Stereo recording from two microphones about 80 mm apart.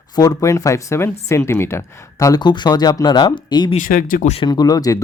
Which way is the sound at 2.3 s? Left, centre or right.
Left.